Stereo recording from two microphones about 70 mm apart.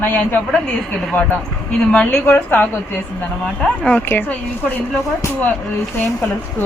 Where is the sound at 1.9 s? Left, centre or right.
Centre.